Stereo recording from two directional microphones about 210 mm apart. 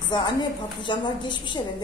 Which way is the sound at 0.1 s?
20° left (ahead or behind).